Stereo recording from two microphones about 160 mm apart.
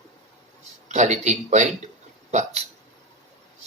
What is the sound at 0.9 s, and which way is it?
Speech, 45° right (ahead or behind).